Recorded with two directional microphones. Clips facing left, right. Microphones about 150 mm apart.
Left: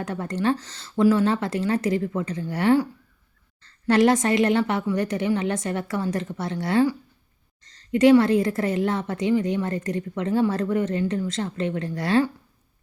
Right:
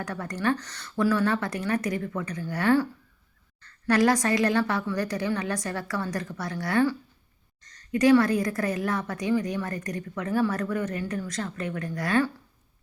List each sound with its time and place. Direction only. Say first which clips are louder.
0.0 s a woman's voice: left 4 dB; 25° left (ahead or behind)